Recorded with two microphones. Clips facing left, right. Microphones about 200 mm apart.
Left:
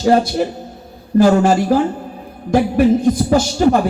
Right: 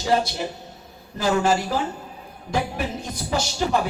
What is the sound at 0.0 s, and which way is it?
A woman's voice, 50° left (ahead or behind).